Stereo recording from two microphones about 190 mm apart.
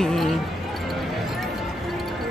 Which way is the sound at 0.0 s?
Centre (ahead or behind).